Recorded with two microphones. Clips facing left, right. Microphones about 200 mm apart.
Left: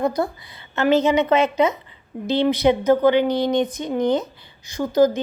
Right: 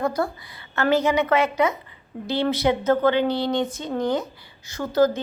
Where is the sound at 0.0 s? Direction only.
20° left (ahead or behind).